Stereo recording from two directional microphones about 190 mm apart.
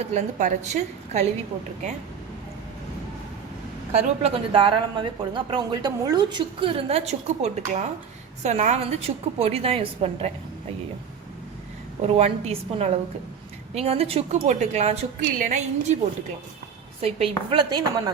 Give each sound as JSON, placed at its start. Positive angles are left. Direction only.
{"t": 0.0, "sound": "a woman's voice", "side_deg": -35}
{"t": 3.9, "sound": "a woman's voice", "side_deg": -30}
{"t": 12.0, "sound": "a woman's voice", "side_deg": -30}
{"t": 17.0, "sound": "speech", "side_deg": -30}